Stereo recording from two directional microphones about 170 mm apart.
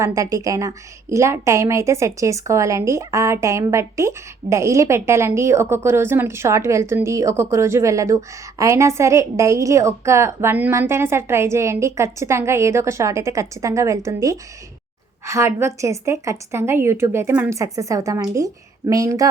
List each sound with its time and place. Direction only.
0.0 s a woman's voice: 20° right (ahead or behind)